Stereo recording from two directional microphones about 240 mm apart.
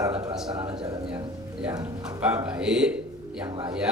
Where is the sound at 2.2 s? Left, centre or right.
Centre.